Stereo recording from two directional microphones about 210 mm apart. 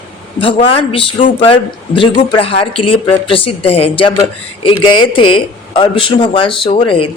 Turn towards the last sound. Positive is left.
turn(degrees=25)  # may be behind; listen again after turning